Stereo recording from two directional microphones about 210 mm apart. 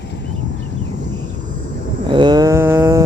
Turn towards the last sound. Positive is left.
turn(degrees=-15)  # may be behind; listen again after turning